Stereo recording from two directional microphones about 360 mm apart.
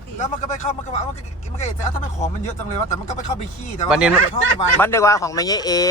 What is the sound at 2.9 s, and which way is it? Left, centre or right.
Speech, centre.